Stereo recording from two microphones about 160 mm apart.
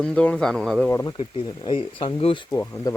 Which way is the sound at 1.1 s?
30° left (ahead or behind).